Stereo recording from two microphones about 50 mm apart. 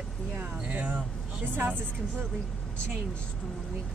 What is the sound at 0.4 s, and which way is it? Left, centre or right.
Speech, right.